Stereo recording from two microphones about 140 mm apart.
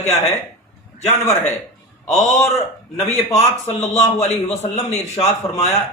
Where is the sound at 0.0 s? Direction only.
55° left (ahead or behind).